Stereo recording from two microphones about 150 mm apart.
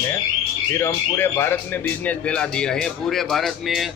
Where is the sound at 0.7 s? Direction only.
15° left (ahead or behind).